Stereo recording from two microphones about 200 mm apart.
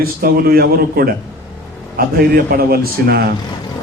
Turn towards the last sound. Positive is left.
turn(degrees=-50)  # may be behind; listen again after turning